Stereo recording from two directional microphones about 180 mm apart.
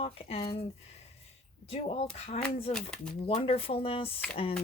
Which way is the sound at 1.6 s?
35° left (ahead or behind).